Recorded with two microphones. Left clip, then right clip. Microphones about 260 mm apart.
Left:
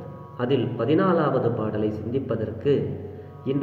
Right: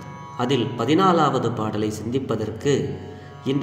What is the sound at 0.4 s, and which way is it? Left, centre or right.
A man's voice, right.